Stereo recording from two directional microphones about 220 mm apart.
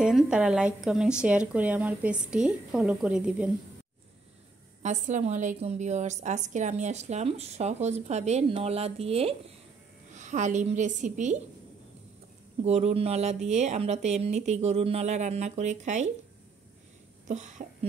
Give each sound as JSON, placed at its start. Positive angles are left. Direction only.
{"t": 0.0, "sound": "speech", "side_deg": -5}
{"t": 4.8, "sound": "a woman's voice", "side_deg": -35}
{"t": 12.6, "sound": "a woman's voice", "side_deg": -30}
{"t": 17.3, "sound": "a woman's voice", "side_deg": -30}